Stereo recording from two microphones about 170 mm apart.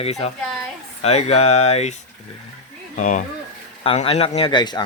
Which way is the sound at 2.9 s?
50° left (ahead or behind).